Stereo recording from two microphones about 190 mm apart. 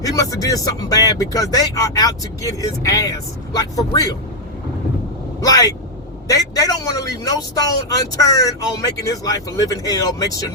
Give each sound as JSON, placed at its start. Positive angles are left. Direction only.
{"t": 0.0, "sound": "speech", "side_deg": 20}
{"t": 5.4, "sound": "speech", "side_deg": 20}